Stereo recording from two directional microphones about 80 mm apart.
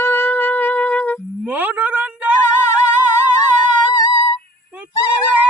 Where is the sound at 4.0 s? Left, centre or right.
Left.